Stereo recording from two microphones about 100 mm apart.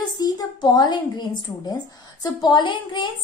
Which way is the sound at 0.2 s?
45° left (ahead or behind).